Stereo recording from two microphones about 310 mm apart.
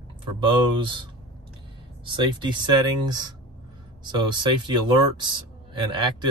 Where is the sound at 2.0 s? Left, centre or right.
Centre.